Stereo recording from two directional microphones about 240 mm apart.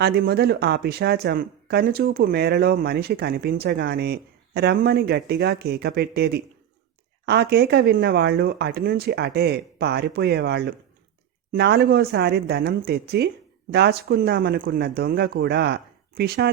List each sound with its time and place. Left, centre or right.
0.0 s speech: right